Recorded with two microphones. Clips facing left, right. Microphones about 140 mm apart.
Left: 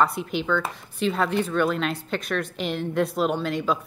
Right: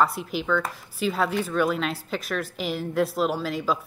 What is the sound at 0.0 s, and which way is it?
Speech, centre (ahead or behind).